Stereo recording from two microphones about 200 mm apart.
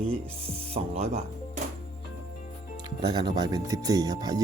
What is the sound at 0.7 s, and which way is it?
Speech, 30° right (ahead or behind).